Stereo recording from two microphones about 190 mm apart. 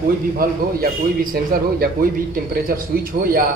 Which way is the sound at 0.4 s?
50° right (ahead or behind).